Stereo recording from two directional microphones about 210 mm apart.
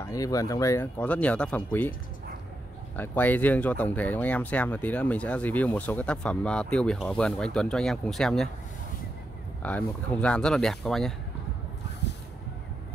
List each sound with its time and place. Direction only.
0.0 s speech: 15° left (ahead or behind)
3.0 s speech: 10° left (ahead or behind)
9.6 s speech: 5° left (ahead or behind)
12.0 s a sound: 55° left (ahead or behind)